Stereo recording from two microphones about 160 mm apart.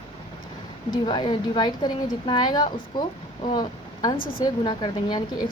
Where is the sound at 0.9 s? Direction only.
25° left (ahead or behind).